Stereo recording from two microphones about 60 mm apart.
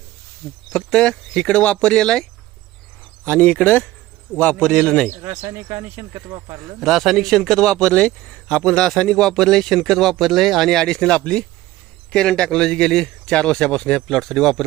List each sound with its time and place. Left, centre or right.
0.7 s a man's voice: centre
3.2 s speech: left
4.4 s a man's voice: centre
5.2 s speech: right
6.3 s a man's voice: right
6.7 s a man's voice: centre